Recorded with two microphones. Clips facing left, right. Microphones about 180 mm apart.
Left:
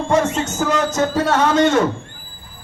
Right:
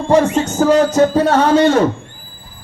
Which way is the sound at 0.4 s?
35° right (ahead or behind).